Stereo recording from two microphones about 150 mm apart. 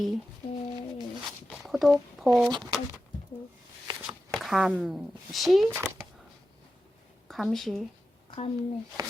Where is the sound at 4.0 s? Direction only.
Centre (ahead or behind).